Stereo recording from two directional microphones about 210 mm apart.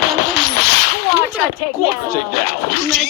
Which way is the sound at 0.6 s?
45° left (ahead or behind).